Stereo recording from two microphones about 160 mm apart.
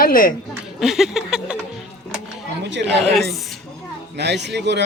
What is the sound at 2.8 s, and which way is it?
Speech, centre (ahead or behind).